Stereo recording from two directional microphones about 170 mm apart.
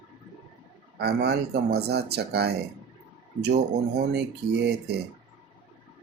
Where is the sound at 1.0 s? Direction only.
75° right (ahead or behind).